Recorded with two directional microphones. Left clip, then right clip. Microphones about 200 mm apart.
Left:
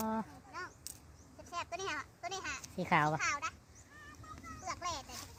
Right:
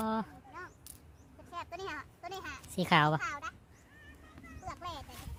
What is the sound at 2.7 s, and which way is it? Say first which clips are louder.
Speech: right 4 dB; 25° right (ahead or behind).